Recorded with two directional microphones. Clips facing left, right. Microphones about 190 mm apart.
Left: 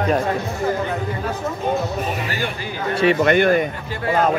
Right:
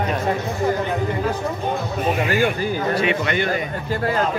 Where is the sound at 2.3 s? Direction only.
45° right (ahead or behind).